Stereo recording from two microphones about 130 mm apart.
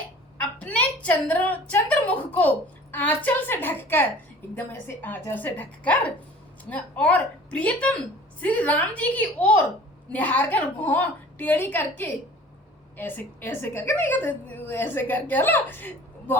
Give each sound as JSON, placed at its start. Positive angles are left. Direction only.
{"t": 0.3, "sound": "a woman's voice", "side_deg": 10}